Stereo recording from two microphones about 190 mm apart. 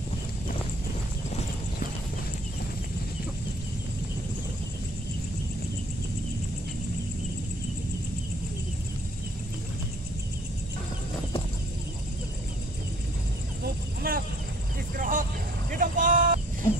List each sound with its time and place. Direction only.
14.0 s vehicle: 50° right (ahead or behind)